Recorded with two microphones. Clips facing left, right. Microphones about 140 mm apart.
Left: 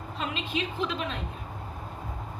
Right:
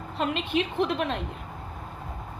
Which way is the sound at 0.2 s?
60° right (ahead or behind).